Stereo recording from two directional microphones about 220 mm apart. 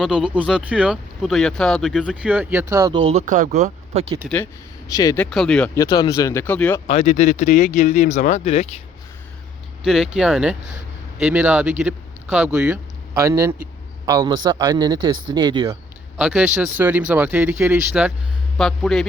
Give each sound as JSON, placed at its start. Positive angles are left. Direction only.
{"t": 0.0, "sound": "speech", "side_deg": -5}
{"t": 3.1, "sound": "speech", "side_deg": -30}
{"t": 4.2, "sound": "speech", "side_deg": 0}
{"t": 4.9, "sound": "speech", "side_deg": 15}
{"t": 6.8, "sound": "speech", "side_deg": 30}
{"t": 9.8, "sound": "speech", "side_deg": 0}
{"t": 16.1, "sound": "speech", "side_deg": -5}